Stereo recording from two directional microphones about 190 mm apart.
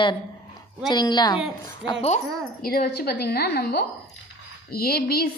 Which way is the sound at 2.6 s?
55° left (ahead or behind).